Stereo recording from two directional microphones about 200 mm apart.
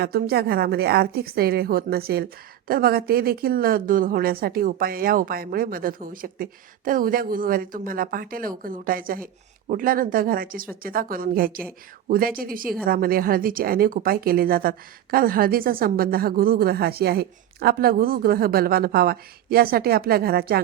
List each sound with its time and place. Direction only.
0.0 s a woman's voice: 50° right (ahead or behind)